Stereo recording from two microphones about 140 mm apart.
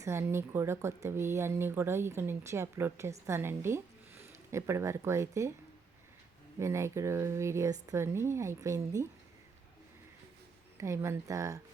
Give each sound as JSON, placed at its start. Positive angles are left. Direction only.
{"t": 0.0, "sound": "speech", "side_deg": -20}
{"t": 6.6, "sound": "speech", "side_deg": -20}
{"t": 10.8, "sound": "speech", "side_deg": -20}